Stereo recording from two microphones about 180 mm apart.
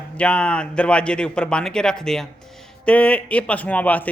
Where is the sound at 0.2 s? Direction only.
5° left (ahead or behind).